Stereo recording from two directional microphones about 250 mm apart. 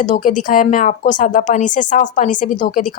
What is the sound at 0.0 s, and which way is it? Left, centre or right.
Speech, left.